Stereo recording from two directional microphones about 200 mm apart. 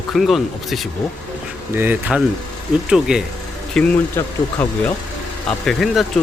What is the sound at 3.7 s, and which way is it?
Speech, 10° left (ahead or behind).